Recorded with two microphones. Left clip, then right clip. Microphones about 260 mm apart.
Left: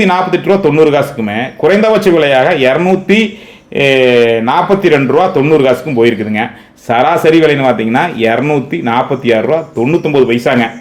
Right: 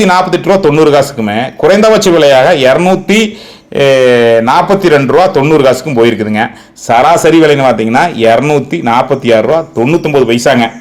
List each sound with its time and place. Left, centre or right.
0.0 s speech: right